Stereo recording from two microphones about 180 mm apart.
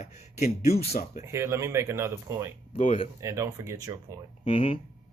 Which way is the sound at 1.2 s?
15° right (ahead or behind).